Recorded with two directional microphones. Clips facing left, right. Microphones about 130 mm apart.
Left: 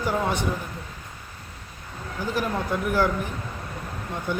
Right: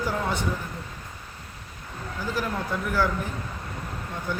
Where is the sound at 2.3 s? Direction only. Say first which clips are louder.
Left 3 dB; 15° left (ahead or behind).